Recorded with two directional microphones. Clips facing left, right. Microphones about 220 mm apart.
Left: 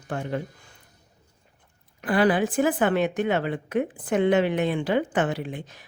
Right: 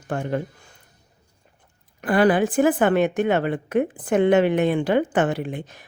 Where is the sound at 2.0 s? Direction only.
50° right (ahead or behind).